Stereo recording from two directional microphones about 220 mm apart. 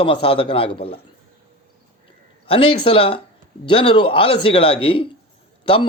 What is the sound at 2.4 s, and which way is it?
Speech, 25° left (ahead or behind).